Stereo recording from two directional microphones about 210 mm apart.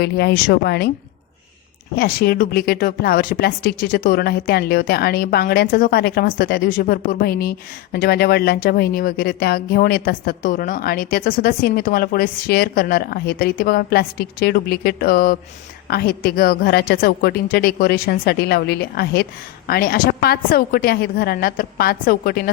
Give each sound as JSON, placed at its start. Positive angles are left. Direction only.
{"t": 0.0, "sound": "speech", "side_deg": 50}
{"t": 2.0, "sound": "speech", "side_deg": 45}